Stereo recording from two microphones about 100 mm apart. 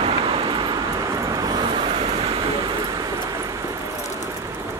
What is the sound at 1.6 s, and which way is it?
Vehicle, 65° right (ahead or behind).